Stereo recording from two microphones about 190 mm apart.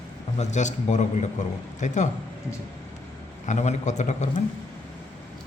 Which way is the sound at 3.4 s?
40° left (ahead or behind).